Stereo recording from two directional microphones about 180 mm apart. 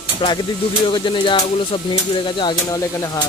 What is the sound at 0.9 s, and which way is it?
Speech, 25° left (ahead or behind).